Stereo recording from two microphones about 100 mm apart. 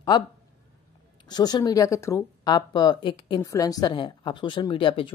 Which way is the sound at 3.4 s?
35° left (ahead or behind).